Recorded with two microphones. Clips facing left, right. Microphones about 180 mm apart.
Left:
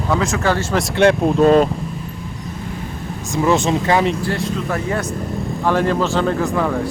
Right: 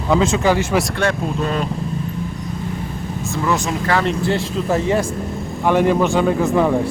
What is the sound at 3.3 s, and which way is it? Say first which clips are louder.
Speech: left 4 dB; 20° left (ahead or behind).